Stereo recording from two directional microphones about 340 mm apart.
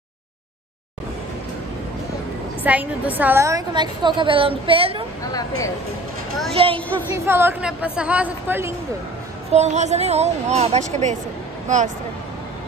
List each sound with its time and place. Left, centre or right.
2.6 s a woman's voice: centre
5.2 s speech: centre
6.5 s a woman's voice: centre
9.5 s a woman's voice: centre